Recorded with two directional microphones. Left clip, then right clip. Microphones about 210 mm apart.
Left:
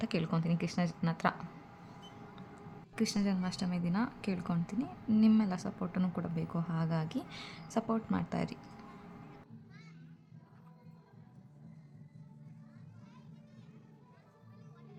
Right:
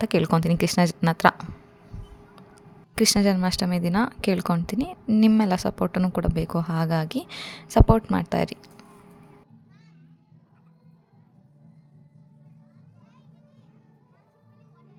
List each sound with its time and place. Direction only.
0.0 s a woman's voice: 50° right (ahead or behind)
2.9 s a woman's voice: 50° right (ahead or behind)